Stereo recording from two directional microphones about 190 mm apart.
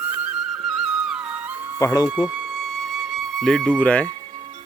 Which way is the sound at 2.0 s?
5° right (ahead or behind).